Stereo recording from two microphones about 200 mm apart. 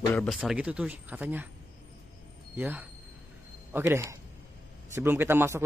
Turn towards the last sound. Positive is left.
turn(degrees=-10)  # may be behind; listen again after turning